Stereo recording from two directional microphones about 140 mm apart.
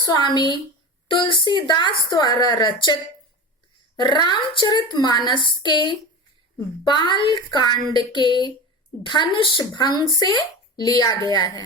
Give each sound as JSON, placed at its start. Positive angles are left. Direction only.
{"t": 0.0, "sound": "a woman's voice", "side_deg": 30}